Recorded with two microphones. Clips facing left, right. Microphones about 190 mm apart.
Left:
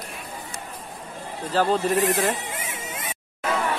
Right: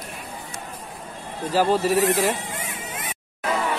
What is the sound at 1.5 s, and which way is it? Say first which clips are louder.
Speech: right 2 dB; 5° right (ahead or behind).